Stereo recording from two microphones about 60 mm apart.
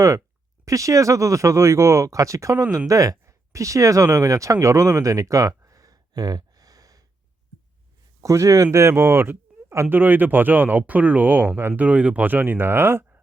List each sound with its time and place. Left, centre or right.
0.6 s speech: right
8.2 s speech: right
9.9 s speech: right
11.8 s speech: right